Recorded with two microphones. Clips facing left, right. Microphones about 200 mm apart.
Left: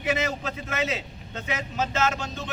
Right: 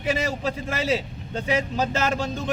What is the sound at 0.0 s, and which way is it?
Speech, 30° right (ahead or behind).